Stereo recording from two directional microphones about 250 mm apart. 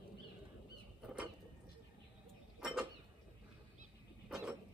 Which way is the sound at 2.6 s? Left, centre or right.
Centre.